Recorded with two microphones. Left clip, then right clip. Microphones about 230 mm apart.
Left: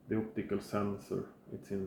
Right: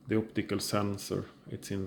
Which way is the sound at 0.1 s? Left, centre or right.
Right.